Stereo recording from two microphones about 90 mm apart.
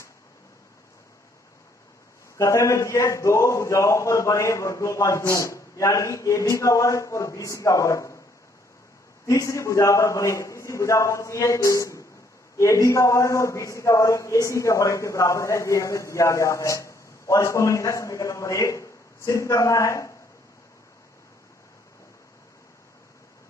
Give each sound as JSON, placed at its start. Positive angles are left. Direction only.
{"t": 2.3, "sound": "a man's voice", "side_deg": 35}
{"t": 9.3, "sound": "a man's voice", "side_deg": 35}